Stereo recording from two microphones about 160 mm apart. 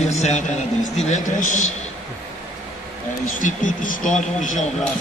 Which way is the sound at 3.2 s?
55° left (ahead or behind).